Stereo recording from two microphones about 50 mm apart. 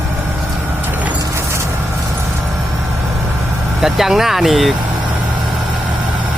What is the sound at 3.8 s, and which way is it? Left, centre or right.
Speech, centre.